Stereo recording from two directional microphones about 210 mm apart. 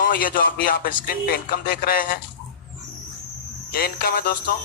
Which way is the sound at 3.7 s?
45° left (ahead or behind).